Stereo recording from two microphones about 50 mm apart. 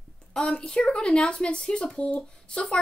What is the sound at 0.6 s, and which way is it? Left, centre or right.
A woman's voice, centre.